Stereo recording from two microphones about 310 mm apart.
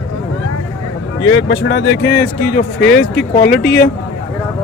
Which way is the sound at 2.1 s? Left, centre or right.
Centre.